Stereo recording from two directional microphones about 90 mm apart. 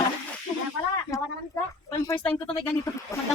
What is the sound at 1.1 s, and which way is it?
A woman's voice, 35° left (ahead or behind).